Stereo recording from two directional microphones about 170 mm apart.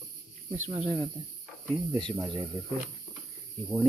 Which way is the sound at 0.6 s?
35° right (ahead or behind).